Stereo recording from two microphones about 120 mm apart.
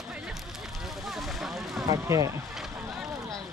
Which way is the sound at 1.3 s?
Centre (ahead or behind).